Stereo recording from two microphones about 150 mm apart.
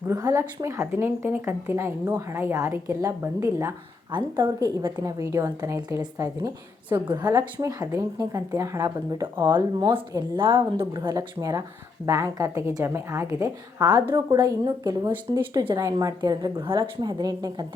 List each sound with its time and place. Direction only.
0.1 s speech: 20° right (ahead or behind)
4.1 s speech: 30° right (ahead or behind)
9.9 s speech: 35° right (ahead or behind)